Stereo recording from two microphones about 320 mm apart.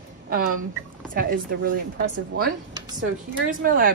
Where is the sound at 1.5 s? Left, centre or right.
Right.